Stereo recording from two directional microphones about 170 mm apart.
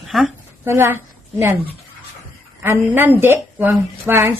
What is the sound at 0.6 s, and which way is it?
Speech, 15° right (ahead or behind).